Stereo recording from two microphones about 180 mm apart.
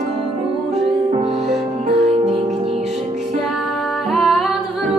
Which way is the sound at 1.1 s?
35° right (ahead or behind).